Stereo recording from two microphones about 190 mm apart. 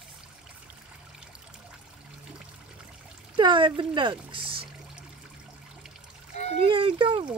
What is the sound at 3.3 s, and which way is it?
Speech, 25° right (ahead or behind).